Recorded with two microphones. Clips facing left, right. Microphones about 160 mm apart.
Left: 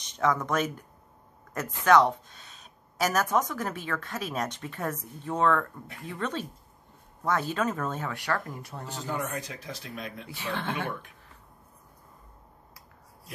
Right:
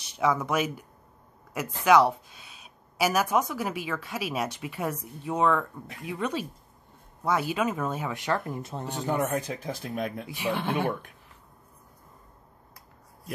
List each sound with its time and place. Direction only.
0.0 s speech: 10° right (ahead or behind); by 8.8 s 25° right (ahead or behind)
8.8 s speech: 55° right (ahead or behind)
10.2 s speech: 15° right (ahead or behind)